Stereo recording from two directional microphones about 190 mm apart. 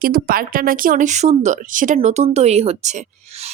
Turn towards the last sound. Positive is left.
turn(degrees=-35)  # may be behind; listen again after turning